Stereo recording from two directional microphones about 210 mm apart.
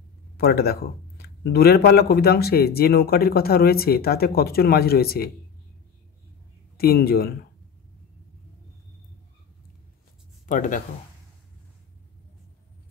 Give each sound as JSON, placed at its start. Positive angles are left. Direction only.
{"t": 0.4, "sound": "speech", "side_deg": 50}
{"t": 6.8, "sound": "speech", "side_deg": 45}
{"t": 10.4, "sound": "speech", "side_deg": 35}